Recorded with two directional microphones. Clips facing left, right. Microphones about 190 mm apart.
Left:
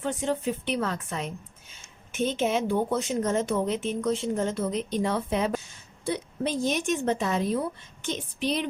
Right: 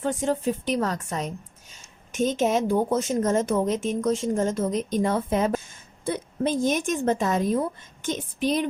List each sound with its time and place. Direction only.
0.0 s a woman's voice: 45° right (ahead or behind)